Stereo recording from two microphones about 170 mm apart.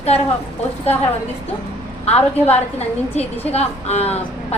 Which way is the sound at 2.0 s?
40° left (ahead or behind).